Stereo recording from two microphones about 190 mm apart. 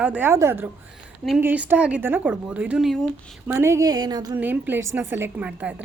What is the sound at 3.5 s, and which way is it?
Speech, 15° right (ahead or behind).